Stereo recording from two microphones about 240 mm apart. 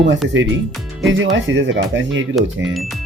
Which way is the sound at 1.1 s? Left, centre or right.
Right.